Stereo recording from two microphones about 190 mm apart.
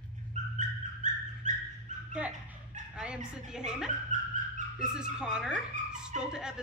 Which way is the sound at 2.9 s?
5° right (ahead or behind).